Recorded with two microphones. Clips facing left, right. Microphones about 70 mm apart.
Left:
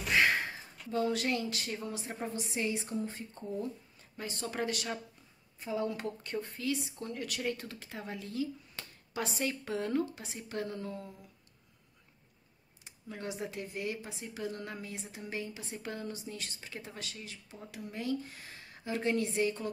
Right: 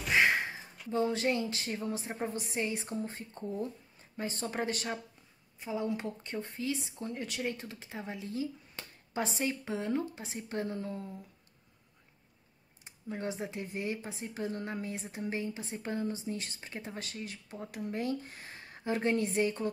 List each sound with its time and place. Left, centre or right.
0.1 s a sound: centre
1.9 s speech: right
5.6 s speech: centre
12.8 s speech: right
17.1 s speech: right